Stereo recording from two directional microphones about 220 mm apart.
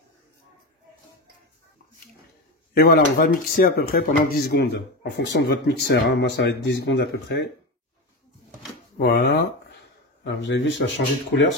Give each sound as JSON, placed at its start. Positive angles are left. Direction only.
{"t": 2.7, "sound": "speech", "side_deg": 45}
{"t": 8.9, "sound": "speech", "side_deg": 45}